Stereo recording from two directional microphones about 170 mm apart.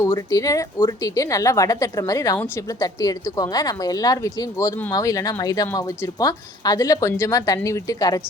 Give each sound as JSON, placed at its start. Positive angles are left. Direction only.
{"t": 0.0, "sound": "a woman's voice", "side_deg": 20}